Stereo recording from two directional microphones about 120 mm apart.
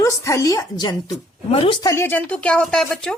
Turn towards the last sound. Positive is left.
turn(degrees=5)  # may be behind; listen again after turning